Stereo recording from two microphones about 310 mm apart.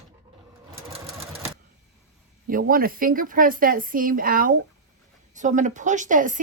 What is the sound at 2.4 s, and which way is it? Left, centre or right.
A woman's voice, right.